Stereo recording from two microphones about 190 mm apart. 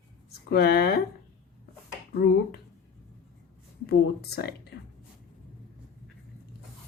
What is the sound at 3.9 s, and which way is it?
Speech, 55° left (ahead or behind).